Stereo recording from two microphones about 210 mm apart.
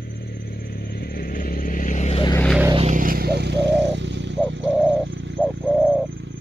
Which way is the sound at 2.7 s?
30° right (ahead or behind).